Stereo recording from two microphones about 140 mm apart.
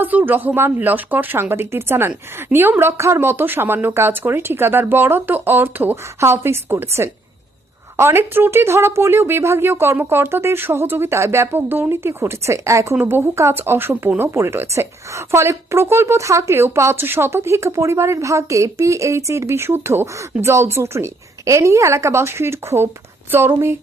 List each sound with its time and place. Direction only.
0.0 s speech: 15° right (ahead or behind)